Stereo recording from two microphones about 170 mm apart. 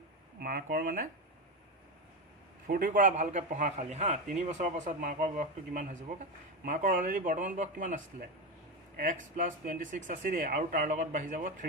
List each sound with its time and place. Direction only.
0.3 s speech: 55° right (ahead or behind)
2.6 s a man's voice: 55° right (ahead or behind)